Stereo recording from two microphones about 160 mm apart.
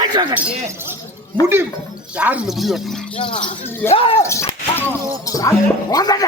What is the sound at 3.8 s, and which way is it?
Speech, 35° left (ahead or behind).